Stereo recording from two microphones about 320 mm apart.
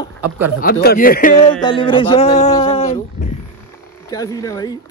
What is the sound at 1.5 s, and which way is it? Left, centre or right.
A man's voice, centre.